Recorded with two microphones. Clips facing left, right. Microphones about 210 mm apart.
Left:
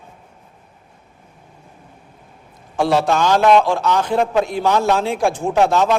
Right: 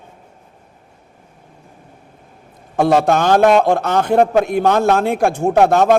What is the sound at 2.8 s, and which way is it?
A man's voice, 55° right (ahead or behind).